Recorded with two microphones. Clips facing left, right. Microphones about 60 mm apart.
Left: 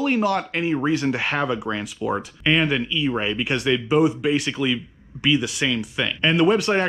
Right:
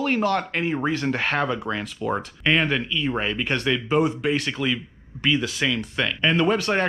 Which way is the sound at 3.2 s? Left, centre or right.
Centre.